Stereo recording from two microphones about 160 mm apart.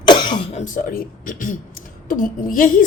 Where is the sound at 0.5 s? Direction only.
55° left (ahead or behind).